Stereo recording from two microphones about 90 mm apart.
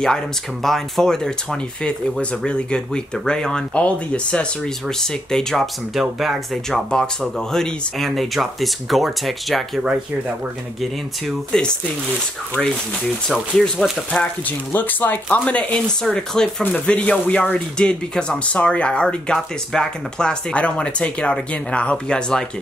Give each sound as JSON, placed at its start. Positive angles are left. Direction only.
{"t": 0.0, "sound": "speech", "side_deg": 5}
{"t": 10.8, "sound": "speech", "side_deg": 5}
{"t": 13.3, "sound": "speech", "side_deg": 0}
{"t": 14.4, "sound": "speech", "side_deg": 20}